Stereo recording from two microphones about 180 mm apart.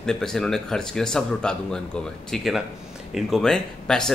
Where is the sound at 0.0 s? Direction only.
5° left (ahead or behind).